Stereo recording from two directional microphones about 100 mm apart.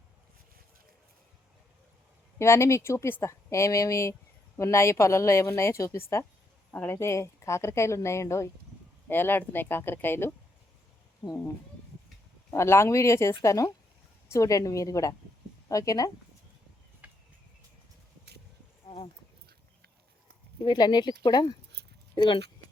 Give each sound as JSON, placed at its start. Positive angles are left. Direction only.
{"t": 2.4, "sound": "speech", "side_deg": 25}
{"t": 12.5, "sound": "a woman's voice", "side_deg": 25}
{"t": 17.0, "sound": "a sound", "side_deg": -15}
{"t": 20.7, "sound": "speech", "side_deg": 45}